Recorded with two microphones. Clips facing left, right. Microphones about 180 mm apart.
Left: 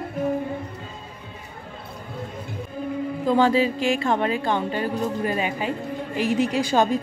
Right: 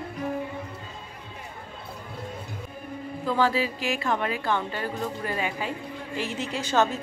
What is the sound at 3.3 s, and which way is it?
A woman's voice, 20° left (ahead or behind).